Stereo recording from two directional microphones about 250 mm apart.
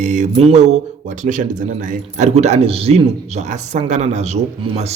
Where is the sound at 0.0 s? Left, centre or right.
Right.